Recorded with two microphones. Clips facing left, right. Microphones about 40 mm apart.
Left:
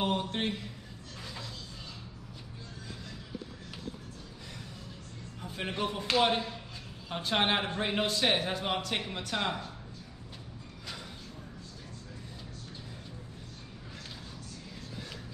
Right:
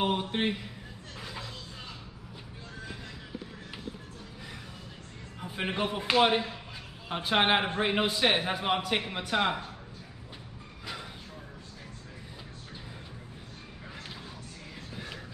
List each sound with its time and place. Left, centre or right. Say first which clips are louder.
0.0 s a man's voice: right 2 dB; centre
5.4 s speech: right 3 dB; right